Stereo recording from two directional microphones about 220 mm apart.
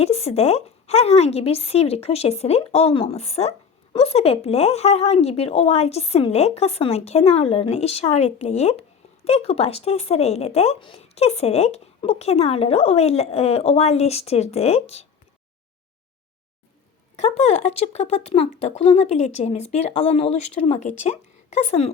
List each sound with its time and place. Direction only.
0.0 s speech: 30° left (ahead or behind)
17.2 s speech: 30° left (ahead or behind)